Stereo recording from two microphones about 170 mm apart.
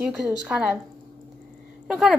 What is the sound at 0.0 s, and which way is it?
Speech, centre (ahead or behind).